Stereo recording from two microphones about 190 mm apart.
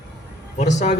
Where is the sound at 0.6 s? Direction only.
40° left (ahead or behind).